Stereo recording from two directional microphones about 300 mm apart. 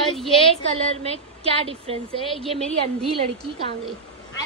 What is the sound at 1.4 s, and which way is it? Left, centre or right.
Speech, centre.